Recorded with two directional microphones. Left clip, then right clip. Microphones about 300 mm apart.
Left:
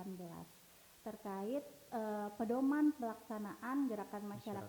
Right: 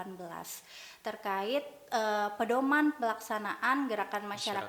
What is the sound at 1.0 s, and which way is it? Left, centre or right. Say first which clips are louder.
A woman's voice: right 11 dB; centre.